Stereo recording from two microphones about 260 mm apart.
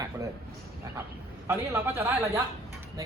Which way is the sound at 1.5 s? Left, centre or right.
Centre.